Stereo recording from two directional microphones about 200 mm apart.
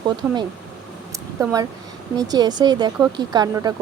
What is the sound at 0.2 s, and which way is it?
Speech, 10° right (ahead or behind).